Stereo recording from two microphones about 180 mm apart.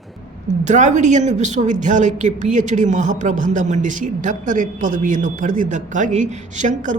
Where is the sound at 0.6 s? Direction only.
40° right (ahead or behind).